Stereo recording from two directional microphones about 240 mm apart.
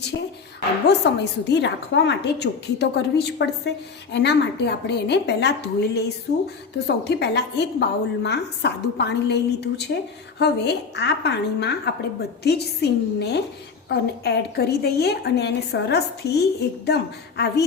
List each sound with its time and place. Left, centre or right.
0.9 s a woman's voice: left